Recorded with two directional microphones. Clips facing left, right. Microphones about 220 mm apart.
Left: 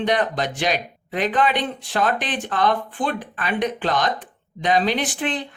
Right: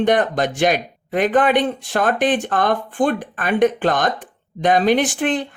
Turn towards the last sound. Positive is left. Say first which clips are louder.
# right 6 dB
turn(degrees=-50)  # may be behind; listen again after turning